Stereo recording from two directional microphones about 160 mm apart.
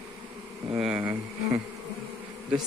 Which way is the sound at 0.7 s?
5° right (ahead or behind).